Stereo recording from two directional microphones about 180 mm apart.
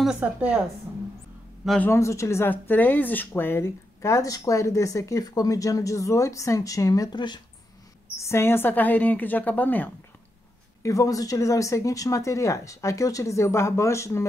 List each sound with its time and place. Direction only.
0.0 s a woman's voice: 5° right (ahead or behind)
1.7 s speech: 10° left (ahead or behind)
8.2 s speech: 15° left (ahead or behind)